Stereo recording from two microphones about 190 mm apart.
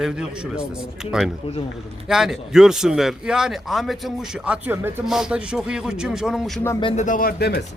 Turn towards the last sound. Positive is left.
turn(degrees=55)  # may be behind; listen again after turning